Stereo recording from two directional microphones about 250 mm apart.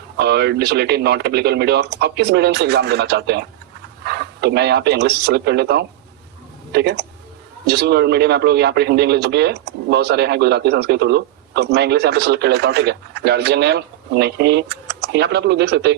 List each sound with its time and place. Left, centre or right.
0.2 s speech: right